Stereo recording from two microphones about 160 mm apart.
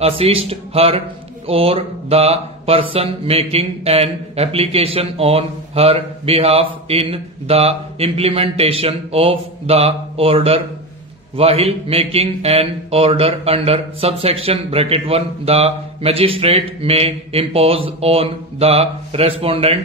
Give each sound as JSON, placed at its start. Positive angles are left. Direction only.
{"t": 0.0, "sound": "speech", "side_deg": -35}